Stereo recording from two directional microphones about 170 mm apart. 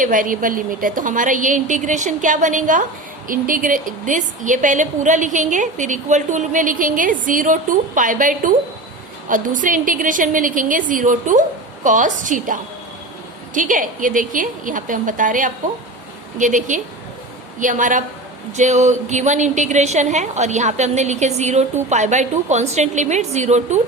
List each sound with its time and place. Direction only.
0.0 s a woman's voice: 50° right (ahead or behind)